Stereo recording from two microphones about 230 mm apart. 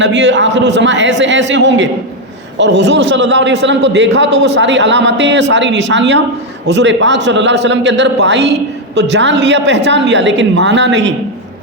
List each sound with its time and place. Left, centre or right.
0.0 s a man's voice: right